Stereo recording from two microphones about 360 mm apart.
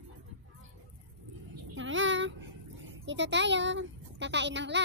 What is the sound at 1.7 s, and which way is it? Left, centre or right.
A child's voice, right.